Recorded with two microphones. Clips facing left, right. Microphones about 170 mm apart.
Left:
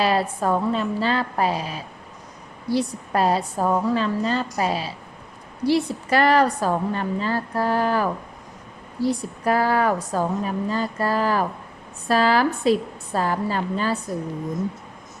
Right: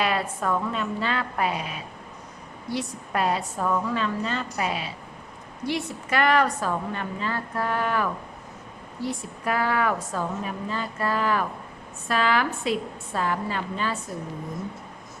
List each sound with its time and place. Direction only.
0.0 s a woman's voice: 30° left (ahead or behind)